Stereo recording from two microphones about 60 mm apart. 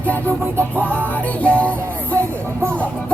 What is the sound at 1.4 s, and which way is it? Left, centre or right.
Music, left.